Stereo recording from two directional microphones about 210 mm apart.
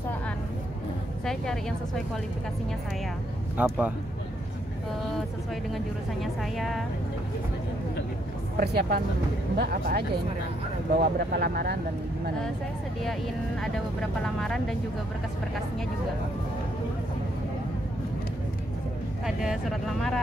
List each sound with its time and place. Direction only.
1.2 s speech: centre (ahead or behind)
3.5 s a man's voice: 5° right (ahead or behind)
6.2 s speech: centre (ahead or behind)
8.5 s speech: 45° right (ahead or behind)
14.2 s speech: 5° left (ahead or behind)
19.2 s speech: centre (ahead or behind)